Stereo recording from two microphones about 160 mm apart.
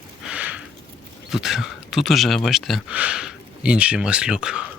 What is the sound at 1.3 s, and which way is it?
Speech, centre (ahead or behind).